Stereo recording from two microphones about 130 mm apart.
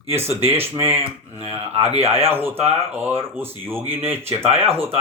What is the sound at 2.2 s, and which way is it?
Speech, 15° right (ahead or behind).